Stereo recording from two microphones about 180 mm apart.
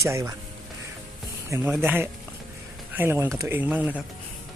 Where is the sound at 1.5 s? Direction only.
10° right (ahead or behind).